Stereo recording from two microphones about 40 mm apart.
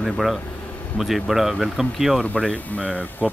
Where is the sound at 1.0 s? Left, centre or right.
Centre.